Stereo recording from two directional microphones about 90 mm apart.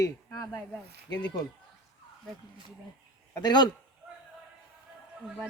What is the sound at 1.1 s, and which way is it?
Speech, 50° left (ahead or behind).